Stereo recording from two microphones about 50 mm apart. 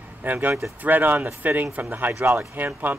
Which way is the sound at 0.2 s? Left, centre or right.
Right.